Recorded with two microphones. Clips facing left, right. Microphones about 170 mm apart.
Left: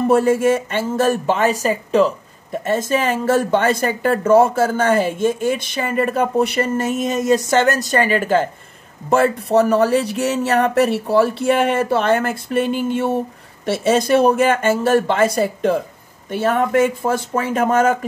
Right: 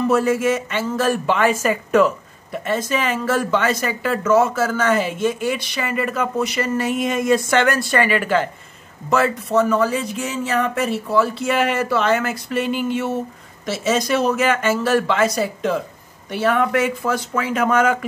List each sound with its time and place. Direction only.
0.0 s speech: 50° left (ahead or behind); by 2.1 s 30° left (ahead or behind)
2.5 s speech: 45° left (ahead or behind)
4.2 s speech: 30° left (ahead or behind)
4.7 s speech: 50° left (ahead or behind)
6.8 s speech: 45° left (ahead or behind)
9.8 s speech: 65° left (ahead or behind); by 17.6 s 50° left (ahead or behind)